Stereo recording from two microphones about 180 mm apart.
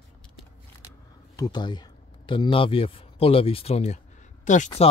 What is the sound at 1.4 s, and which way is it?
Speech, 25° left (ahead or behind).